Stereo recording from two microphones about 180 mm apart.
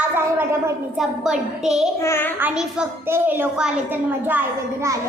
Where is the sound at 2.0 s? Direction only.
15° left (ahead or behind).